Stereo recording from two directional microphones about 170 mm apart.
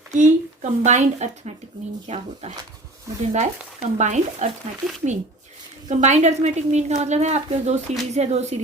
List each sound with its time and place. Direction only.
0.1 s a woman's voice: 45° right (ahead or behind)
5.9 s a woman's voice: 45° right (ahead or behind)